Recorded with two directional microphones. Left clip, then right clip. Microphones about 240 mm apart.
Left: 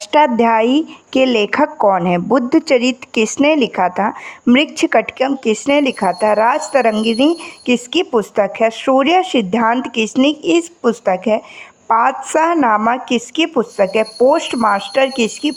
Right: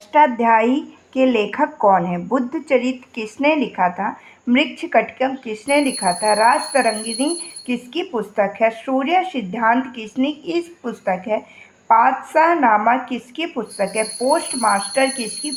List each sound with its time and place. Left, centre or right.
0.1 s a woman's voice: left